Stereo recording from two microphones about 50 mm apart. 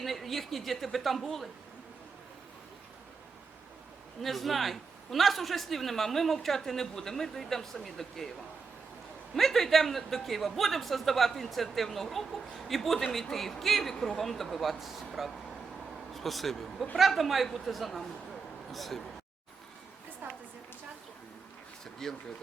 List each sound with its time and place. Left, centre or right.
0.0 s a man's voice: centre
4.2 s a man's voice: centre
9.3 s a man's voice: centre
20.2 s a sound: right
22.0 s speech: centre